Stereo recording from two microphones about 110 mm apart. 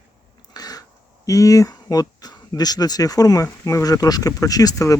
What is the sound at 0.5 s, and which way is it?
Speech, 35° left (ahead or behind).